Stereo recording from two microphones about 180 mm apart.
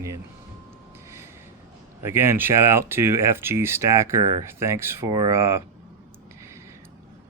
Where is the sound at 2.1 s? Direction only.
10° right (ahead or behind).